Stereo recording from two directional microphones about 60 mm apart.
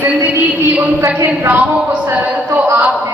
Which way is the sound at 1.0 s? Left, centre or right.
Right.